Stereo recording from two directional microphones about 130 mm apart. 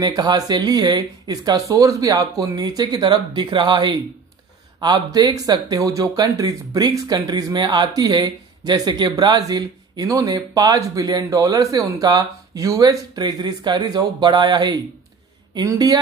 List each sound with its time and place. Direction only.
0.0 s speech: 30° right (ahead or behind)